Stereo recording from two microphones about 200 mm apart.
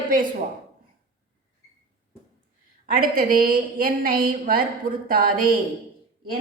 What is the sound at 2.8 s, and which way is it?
Speech, 45° right (ahead or behind).